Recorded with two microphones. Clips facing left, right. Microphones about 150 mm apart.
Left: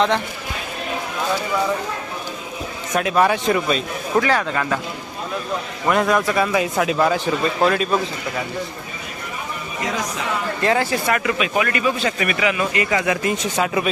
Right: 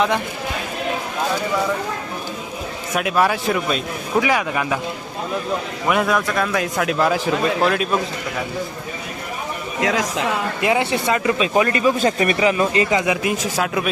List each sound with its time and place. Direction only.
2.9 s a man's voice: 5° right (ahead or behind)
5.9 s a man's voice: centre (ahead or behind)
9.8 s a woman's voice: 90° right
10.6 s speech: 15° right (ahead or behind)
13.2 s a man's voice: centre (ahead or behind)